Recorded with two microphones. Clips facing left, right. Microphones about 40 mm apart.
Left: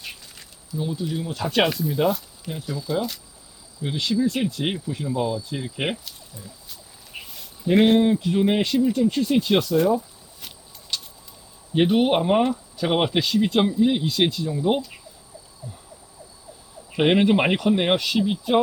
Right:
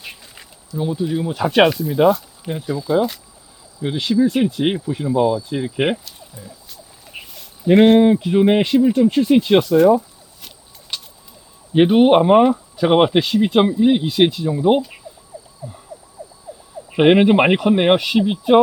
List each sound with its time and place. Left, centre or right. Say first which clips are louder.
0.8 s speech: right 6 dB; centre
6.1 s fowl: right 4 dB; centre
7.1 s a sound: right 2 dB; centre
8.0 s speech: right 6 dB; centre
10.9 s vehicle: right 1 dB; centre
11.7 s speech: right 7 dB; centre
15.3 s emergency vehicle: right 8 dB; centre
16.2 s vehicle: right 10 dB; centre
16.9 s speech: right 6 dB; right